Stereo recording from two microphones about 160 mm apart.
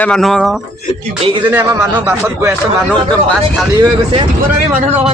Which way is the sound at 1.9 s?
10° right (ahead or behind).